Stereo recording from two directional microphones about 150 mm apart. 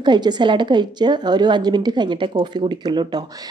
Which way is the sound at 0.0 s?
30° right (ahead or behind).